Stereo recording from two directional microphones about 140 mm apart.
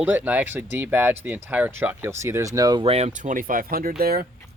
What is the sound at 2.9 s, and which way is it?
Speech, 50° right (ahead or behind).